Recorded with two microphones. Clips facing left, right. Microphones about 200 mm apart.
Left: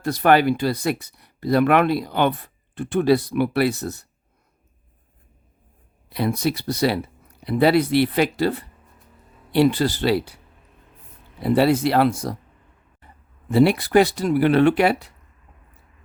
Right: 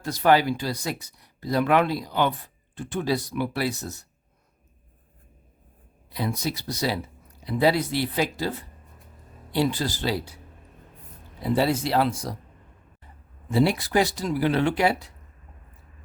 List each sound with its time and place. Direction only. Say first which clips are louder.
0.0 s speech: left 3 dB; 60° left (ahead or behind)
6.1 s speech: left 6 dB; 65° left (ahead or behind)
11.4 s speech: left 6 dB; 65° left (ahead or behind)
13.5 s speech: left 6 dB; 60° left (ahead or behind)